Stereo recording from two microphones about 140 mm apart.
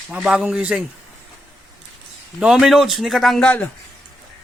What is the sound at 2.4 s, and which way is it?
A man's voice, 5° right (ahead or behind).